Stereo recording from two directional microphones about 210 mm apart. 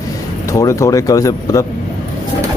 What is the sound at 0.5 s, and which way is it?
Speech, 15° left (ahead or behind).